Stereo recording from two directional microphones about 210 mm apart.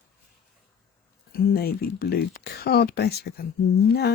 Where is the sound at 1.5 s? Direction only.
45° left (ahead or behind).